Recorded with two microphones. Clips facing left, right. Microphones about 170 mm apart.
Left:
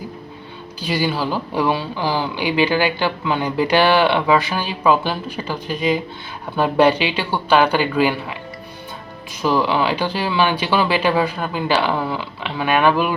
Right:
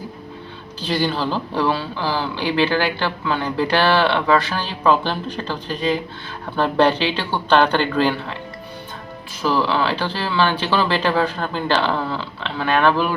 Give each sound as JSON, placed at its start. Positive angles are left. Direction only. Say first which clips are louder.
{"t": 0.8, "sound": "speech", "louder": "even", "side_deg": 10}
{"t": 9.4, "sound": "speech", "louder": "left 1 dB", "side_deg": 15}